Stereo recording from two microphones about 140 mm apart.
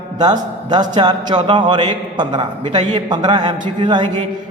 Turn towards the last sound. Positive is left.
turn(degrees=-35)  # may be behind; listen again after turning